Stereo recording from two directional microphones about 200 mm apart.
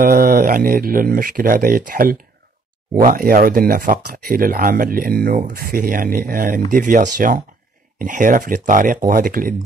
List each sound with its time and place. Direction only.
0.0 s speech: 45° right (ahead or behind)